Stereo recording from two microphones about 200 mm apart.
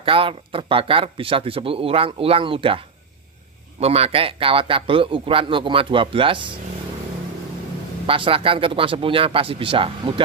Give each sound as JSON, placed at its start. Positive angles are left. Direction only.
{"t": 0.0, "sound": "speech", "side_deg": -25}
{"t": 3.8, "sound": "speech", "side_deg": -30}
{"t": 8.1, "sound": "speech", "side_deg": -25}